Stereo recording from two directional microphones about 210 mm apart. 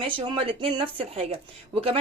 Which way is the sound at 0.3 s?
25° right (ahead or behind).